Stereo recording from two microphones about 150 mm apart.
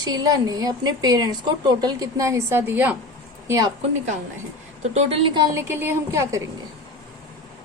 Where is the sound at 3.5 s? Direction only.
25° right (ahead or behind).